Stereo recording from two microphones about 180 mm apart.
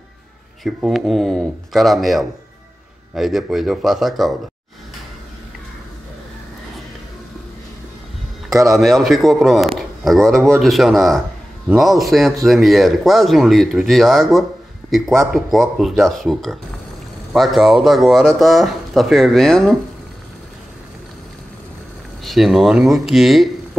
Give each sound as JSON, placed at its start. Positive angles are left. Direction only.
{"t": 0.7, "sound": "speech", "side_deg": 0}
{"t": 8.5, "sound": "a man's voice", "side_deg": -15}
{"t": 8.7, "sound": "a man's voice", "side_deg": 0}
{"t": 22.2, "sound": "speech", "side_deg": 0}